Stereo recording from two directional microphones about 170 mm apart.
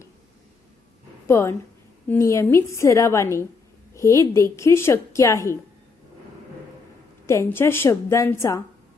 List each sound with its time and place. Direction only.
1.3 s a woman's voice: 15° left (ahead or behind)
3.9 s a sound: 15° left (ahead or behind)
4.5 s a woman's voice: 15° left (ahead or behind)
7.3 s a woman's voice: 15° left (ahead or behind)